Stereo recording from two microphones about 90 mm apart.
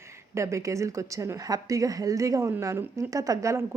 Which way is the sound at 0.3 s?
35° right (ahead or behind).